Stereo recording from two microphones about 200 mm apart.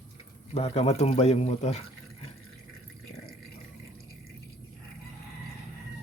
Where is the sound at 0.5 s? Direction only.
30° left (ahead or behind).